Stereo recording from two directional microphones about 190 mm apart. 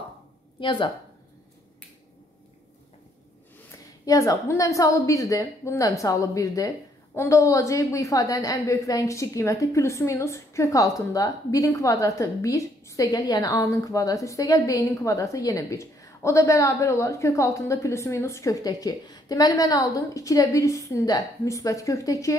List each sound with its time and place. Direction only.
0.6 s speech: 25° left (ahead or behind)
4.0 s a woman's voice: 20° left (ahead or behind)